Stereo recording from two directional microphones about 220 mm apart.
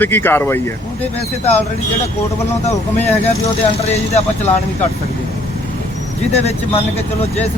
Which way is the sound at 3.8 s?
30° left (ahead or behind).